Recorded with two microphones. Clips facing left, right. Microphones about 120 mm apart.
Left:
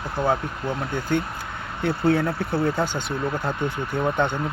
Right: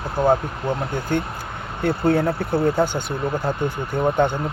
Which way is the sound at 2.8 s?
45° right (ahead or behind).